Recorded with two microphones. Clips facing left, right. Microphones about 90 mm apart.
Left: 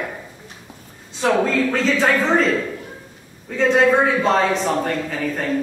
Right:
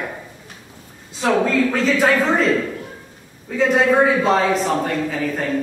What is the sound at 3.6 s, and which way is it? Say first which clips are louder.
A man's voice: even; centre (ahead or behind).